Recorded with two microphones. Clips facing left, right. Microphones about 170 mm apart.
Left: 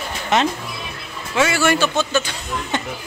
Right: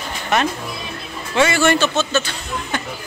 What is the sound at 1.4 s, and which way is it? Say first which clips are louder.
Speech: right 2 dB; 5° left (ahead or behind).